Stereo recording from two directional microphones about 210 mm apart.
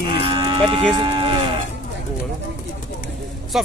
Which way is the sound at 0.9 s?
25° right (ahead or behind).